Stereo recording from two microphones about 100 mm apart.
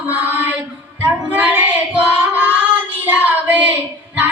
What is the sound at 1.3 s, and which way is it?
Child singing, 15° right (ahead or behind).